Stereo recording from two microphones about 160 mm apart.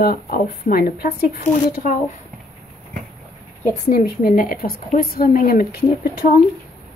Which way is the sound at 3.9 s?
65° left (ahead or behind).